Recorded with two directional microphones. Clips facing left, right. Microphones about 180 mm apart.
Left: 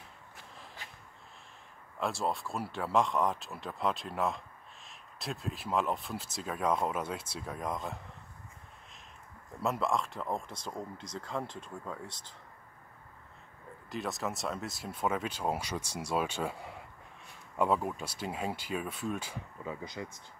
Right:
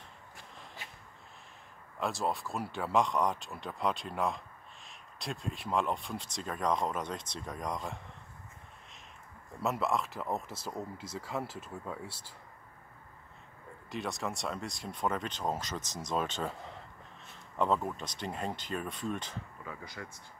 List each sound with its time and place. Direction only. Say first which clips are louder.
2.0 s speech: even; centre (ahead or behind)
9.6 s speech: even; centre (ahead or behind)
13.8 s speech: left 1 dB; centre (ahead or behind)
19.6 s speech: left 8 dB; 20° left (ahead or behind)